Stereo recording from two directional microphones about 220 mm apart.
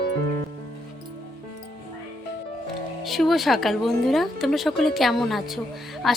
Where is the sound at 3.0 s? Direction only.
Centre (ahead or behind).